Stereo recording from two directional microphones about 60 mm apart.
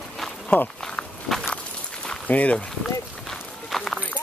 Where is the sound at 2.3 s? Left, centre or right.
Left.